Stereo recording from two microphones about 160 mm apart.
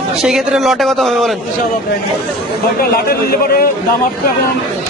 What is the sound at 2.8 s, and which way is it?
Speech, 70° left (ahead or behind).